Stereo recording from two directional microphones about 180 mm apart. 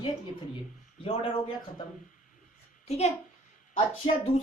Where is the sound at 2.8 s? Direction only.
35° left (ahead or behind).